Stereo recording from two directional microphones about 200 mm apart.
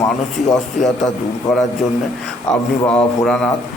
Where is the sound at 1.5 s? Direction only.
15° left (ahead or behind).